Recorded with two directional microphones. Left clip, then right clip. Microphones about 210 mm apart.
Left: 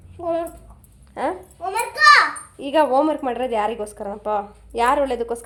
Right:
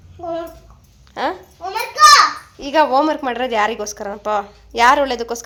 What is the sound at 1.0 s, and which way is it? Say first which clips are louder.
Dog: right 3 dB; 5° left (ahead or behind).